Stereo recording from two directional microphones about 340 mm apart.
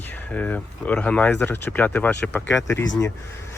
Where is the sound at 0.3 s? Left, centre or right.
Centre.